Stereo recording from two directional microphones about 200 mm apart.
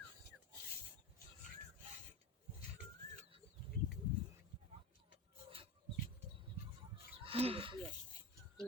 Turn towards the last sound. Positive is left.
turn(degrees=-30)  # may be behind; listen again after turning